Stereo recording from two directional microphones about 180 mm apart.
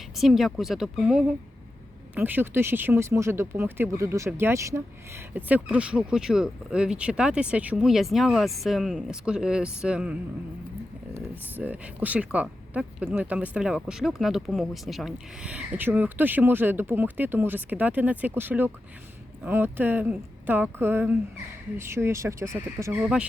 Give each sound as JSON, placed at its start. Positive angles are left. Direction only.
{"t": 0.2, "sound": "speech", "side_deg": 0}